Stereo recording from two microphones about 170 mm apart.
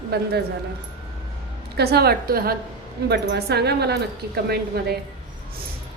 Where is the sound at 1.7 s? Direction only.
70° right (ahead or behind).